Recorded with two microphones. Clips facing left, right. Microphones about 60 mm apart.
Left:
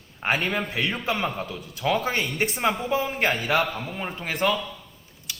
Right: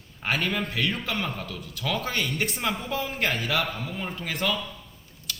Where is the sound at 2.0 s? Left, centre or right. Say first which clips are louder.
Left 3 dB; left.